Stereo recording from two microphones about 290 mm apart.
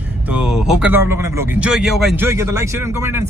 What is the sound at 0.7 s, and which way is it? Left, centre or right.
A man's voice, centre.